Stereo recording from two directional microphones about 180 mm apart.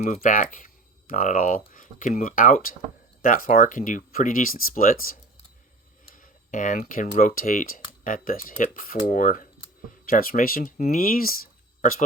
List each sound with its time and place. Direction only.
0.0 s speech: 45° left (ahead or behind)